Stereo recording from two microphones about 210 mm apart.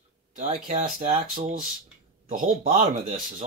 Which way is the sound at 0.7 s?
40° right (ahead or behind).